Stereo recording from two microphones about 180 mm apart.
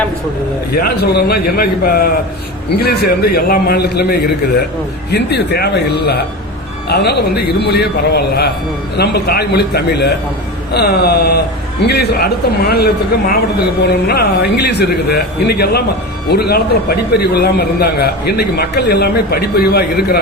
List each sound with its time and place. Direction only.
0.8 s a man's voice: 60° left (ahead or behind)